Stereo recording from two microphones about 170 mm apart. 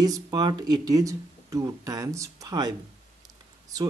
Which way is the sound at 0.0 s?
25° right (ahead or behind).